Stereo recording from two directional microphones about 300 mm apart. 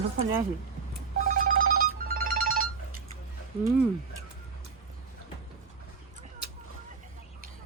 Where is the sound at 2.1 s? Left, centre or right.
Right.